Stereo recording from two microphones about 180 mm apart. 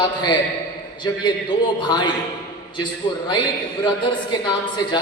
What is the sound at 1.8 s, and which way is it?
Speech, 25° left (ahead or behind).